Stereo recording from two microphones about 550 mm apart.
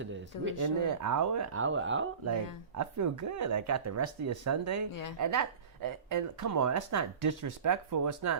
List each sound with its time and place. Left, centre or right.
0.0 s speech: centre
0.6 s speech: right
2.7 s speech: right